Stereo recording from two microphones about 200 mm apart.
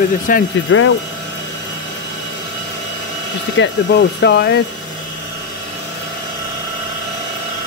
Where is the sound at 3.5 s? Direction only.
55° left (ahead or behind).